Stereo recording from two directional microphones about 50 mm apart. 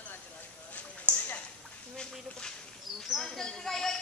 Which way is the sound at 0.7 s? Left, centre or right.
Left.